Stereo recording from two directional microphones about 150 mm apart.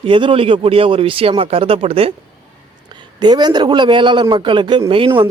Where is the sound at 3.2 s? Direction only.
25° right (ahead or behind).